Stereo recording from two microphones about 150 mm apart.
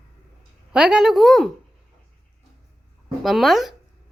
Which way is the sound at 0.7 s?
5° right (ahead or behind).